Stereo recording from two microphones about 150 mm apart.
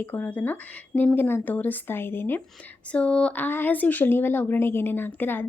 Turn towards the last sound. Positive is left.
turn(degrees=15)  # may be behind; listen again after turning